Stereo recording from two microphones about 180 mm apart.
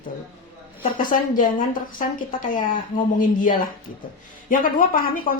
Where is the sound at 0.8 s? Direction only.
50° left (ahead or behind).